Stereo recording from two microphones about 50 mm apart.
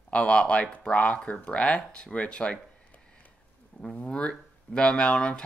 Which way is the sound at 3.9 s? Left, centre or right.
Left.